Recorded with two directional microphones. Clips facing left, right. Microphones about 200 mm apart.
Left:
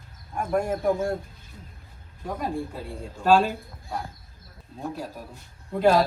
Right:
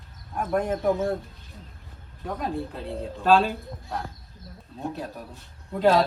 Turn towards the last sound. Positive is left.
turn(degrees=0)  # may be behind; listen again after turning